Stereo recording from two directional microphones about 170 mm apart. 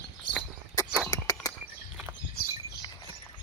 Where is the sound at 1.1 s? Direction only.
20° left (ahead or behind).